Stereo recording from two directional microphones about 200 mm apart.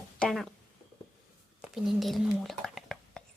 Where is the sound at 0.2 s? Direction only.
Centre (ahead or behind).